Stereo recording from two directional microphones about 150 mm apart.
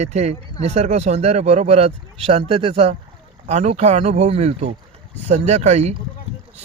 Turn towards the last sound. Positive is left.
turn(degrees=-45)  # may be behind; listen again after turning